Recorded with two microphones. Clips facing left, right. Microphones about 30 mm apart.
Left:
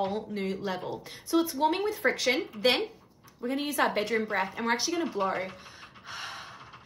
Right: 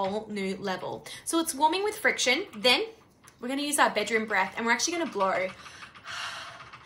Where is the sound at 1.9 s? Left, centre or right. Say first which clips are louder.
Right 1 dB; right.